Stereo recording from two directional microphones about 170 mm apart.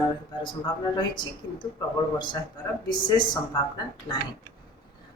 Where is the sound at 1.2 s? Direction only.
25° left (ahead or behind).